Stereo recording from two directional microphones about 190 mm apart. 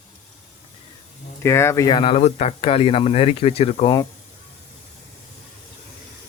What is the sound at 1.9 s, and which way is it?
Speech, 30° left (ahead or behind).